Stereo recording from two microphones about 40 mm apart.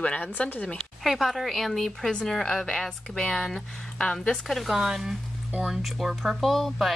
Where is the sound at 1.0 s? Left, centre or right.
Centre.